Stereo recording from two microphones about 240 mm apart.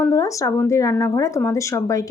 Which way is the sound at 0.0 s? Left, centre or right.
Centre.